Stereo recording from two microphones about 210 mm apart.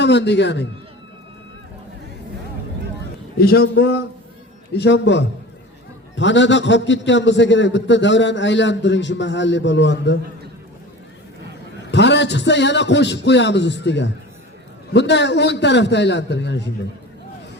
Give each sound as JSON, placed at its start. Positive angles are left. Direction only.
{"t": 0.0, "sound": "a man's voice", "side_deg": 55}
{"t": 3.3, "sound": "a man's voice", "side_deg": 45}
{"t": 11.9, "sound": "a man's voice", "side_deg": 55}